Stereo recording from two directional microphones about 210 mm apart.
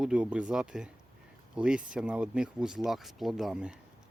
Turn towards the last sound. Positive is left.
turn(degrees=-5)  # may be behind; listen again after turning